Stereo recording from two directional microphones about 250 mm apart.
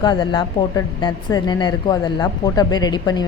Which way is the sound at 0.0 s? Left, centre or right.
Centre.